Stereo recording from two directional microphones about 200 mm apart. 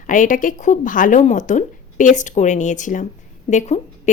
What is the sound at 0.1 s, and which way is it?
Speech, 40° left (ahead or behind).